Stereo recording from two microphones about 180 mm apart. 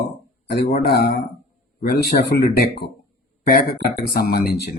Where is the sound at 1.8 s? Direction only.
60° left (ahead or behind).